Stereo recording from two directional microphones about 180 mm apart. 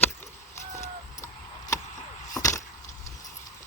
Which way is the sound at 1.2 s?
15° left (ahead or behind).